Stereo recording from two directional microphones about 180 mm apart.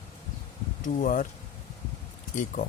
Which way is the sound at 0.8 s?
45° left (ahead or behind).